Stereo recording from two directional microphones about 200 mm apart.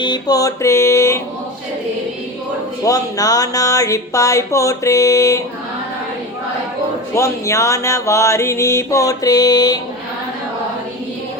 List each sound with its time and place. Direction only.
0.0 s mantra: 20° left (ahead or behind)
2.8 s mantra: 15° left (ahead or behind)
7.1 s mantra: 15° left (ahead or behind)